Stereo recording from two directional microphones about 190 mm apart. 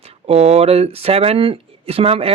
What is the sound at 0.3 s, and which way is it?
Speech, 35° right (ahead or behind).